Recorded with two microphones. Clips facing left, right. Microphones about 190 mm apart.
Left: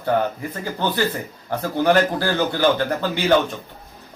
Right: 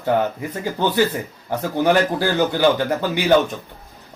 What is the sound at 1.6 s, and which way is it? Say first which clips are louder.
A man's voice: even; 15° right (ahead or behind).